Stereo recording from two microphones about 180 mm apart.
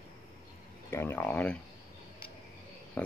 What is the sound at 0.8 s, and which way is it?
Speech, 10° left (ahead or behind).